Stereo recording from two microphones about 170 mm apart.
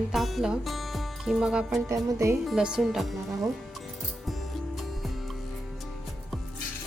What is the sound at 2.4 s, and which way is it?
Music, 5° right (ahead or behind).